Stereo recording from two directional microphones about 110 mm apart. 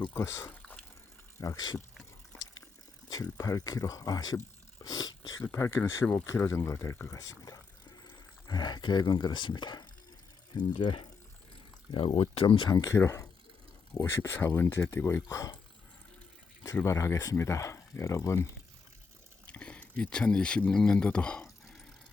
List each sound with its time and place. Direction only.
0.1 s speech: 25° left (ahead or behind)
1.4 s speech: 35° left (ahead or behind)
3.1 s speech: 30° left (ahead or behind)
4.8 s a sound: 35° left (ahead or behind)
5.4 s speech: 25° left (ahead or behind); by 12.6 s 55° left (ahead or behind)
12.6 s speech: 40° left (ahead or behind)
12.9 s speech: 25° left (ahead or behind)
16.8 s speech: 25° left (ahead or behind)
19.5 s speech: 10° left (ahead or behind)